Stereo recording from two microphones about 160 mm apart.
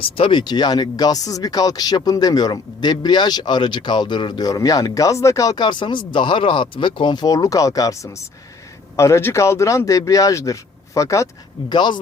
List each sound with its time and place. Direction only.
0.0 s speech: 30° left (ahead or behind)